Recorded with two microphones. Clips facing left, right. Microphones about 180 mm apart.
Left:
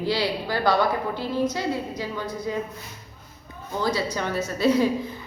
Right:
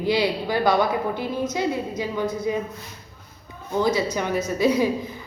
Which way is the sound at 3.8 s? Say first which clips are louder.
Right 2 dB; 20° right (ahead or behind).